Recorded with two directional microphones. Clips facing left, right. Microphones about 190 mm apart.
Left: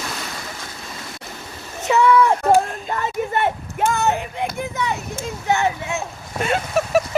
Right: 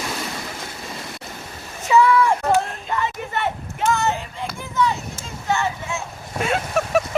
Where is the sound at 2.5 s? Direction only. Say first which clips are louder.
Left 3 dB; 45° left (ahead or behind); by 4.9 s 65° left (ahead or behind).